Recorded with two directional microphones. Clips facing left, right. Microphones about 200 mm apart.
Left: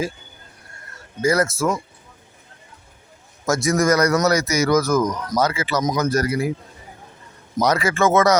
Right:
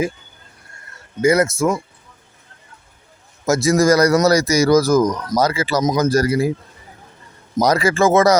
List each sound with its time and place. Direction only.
1.2 s speech: 20° right (ahead or behind)
3.4 s a man's voice: 25° right (ahead or behind)
7.6 s a man's voice: 35° right (ahead or behind)